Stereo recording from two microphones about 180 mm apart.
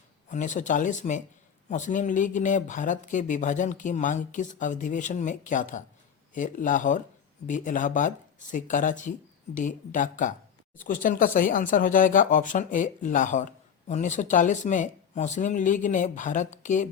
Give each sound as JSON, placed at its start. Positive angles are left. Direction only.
{"t": 0.3, "sound": "speech", "side_deg": 45}